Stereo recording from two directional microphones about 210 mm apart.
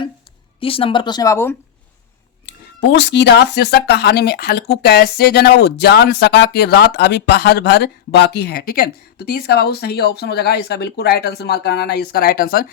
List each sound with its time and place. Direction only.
0.6 s speech: 25° left (ahead or behind)
2.5 s speech: 55° left (ahead or behind)